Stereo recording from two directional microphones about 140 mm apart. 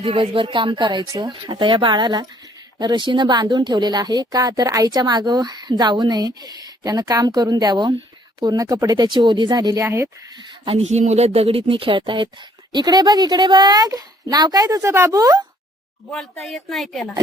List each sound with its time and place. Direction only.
0.0 s speech: 50° right (ahead or behind)
0.3 s a woman's voice: 35° right (ahead or behind); by 10.1 s 20° right (ahead or behind)
10.3 s a woman's voice: 45° right (ahead or behind); by 15.4 s 25° right (ahead or behind)
16.4 s a woman's voice: centre (ahead or behind)